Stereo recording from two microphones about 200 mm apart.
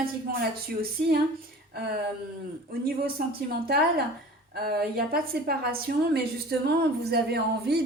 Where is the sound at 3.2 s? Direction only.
50° right (ahead or behind).